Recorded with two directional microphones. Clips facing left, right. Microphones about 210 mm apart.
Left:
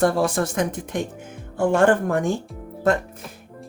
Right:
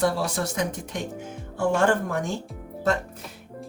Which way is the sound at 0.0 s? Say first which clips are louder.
Left 5 dB; 50° left (ahead or behind).